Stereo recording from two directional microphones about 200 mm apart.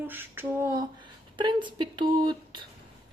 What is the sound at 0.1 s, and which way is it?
Speech, 10° right (ahead or behind).